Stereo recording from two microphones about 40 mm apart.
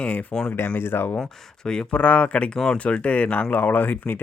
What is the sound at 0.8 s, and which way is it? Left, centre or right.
Speech, left.